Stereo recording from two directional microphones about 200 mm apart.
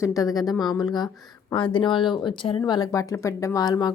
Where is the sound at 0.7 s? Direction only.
20° left (ahead or behind).